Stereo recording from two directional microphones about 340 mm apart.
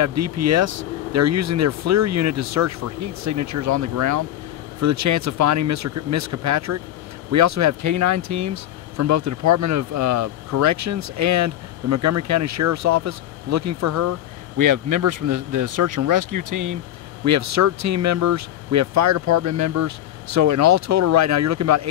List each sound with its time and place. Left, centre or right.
0.0 s speech: right